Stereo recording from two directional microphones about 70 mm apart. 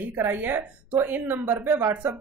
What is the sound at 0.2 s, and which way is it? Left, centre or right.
Speech, right.